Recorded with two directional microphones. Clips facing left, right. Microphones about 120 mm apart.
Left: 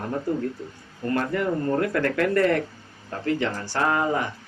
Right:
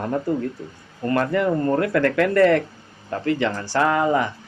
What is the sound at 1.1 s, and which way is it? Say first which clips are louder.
Speech: right 4 dB; 90° right.